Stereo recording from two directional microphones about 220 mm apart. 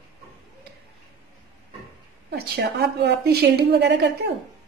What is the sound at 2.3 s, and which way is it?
A woman's voice, 50° right (ahead or behind).